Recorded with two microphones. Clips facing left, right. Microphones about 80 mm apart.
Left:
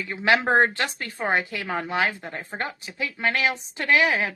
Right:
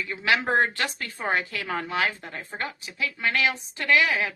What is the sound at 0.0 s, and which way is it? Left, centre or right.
A woman's voice, left.